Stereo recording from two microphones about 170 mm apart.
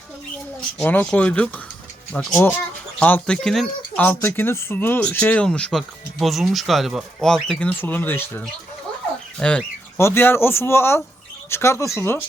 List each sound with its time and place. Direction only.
0.8 s speech: 10° left (ahead or behind)